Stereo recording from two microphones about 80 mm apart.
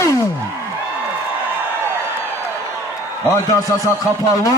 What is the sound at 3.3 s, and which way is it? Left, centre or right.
Speech, left.